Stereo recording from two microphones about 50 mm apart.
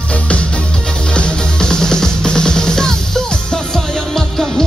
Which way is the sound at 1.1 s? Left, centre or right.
Centre.